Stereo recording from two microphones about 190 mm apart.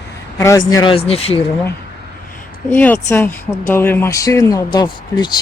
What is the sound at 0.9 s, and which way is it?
Speech, 30° left (ahead or behind).